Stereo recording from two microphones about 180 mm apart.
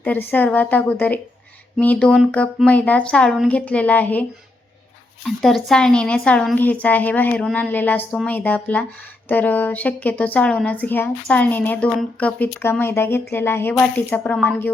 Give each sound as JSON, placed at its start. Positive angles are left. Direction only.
{"t": 0.0, "sound": "a woman's voice", "side_deg": 10}